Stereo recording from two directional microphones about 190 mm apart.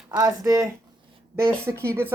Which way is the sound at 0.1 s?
15° right (ahead or behind).